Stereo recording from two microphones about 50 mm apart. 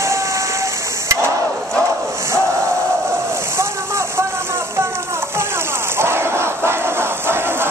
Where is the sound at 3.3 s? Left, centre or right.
Right.